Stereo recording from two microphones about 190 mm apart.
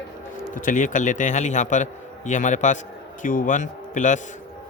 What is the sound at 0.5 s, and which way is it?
A man's voice, 40° left (ahead or behind).